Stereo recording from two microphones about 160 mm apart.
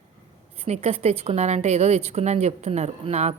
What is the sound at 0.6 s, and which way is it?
A woman's voice, 40° right (ahead or behind).